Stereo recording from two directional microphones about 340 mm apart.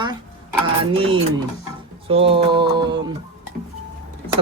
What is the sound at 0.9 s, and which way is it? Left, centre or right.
Speech, centre.